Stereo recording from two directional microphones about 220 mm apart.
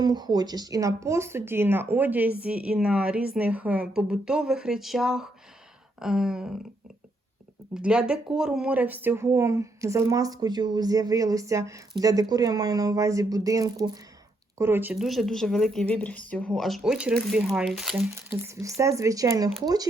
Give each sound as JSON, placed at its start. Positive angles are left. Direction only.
{"t": 0.0, "sound": "speech", "side_deg": -20}
{"t": 7.7, "sound": "speech", "side_deg": -5}